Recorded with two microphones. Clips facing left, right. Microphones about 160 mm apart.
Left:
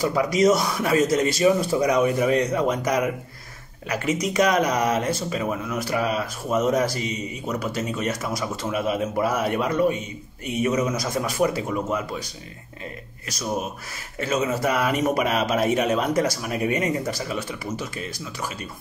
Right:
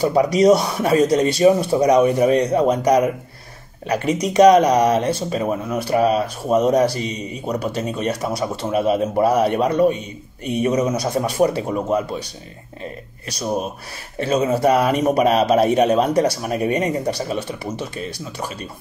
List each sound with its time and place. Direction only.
0.0 s a man's voice: 30° right (ahead or behind)
14.1 s a man's voice: 30° right (ahead or behind)